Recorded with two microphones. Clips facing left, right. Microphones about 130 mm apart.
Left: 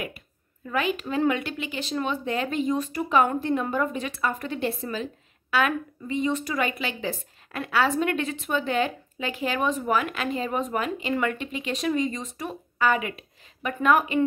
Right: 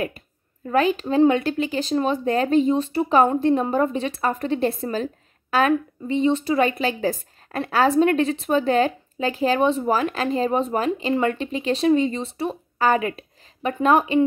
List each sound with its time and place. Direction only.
0.7 s a woman's voice: 35° right (ahead or behind)